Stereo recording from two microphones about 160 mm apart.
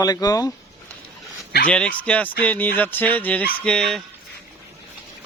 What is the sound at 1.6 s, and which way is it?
Fowl, 10° left (ahead or behind).